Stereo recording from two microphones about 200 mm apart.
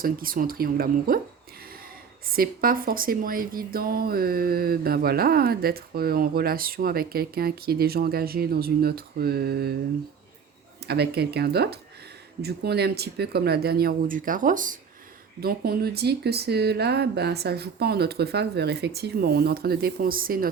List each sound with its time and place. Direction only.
0.0 s speech: 45° right (ahead or behind)
10.8 s speech: 55° right (ahead or behind)